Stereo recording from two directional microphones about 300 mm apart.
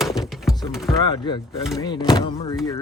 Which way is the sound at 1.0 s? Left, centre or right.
Centre.